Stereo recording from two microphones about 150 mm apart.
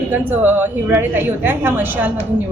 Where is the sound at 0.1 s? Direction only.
10° right (ahead or behind).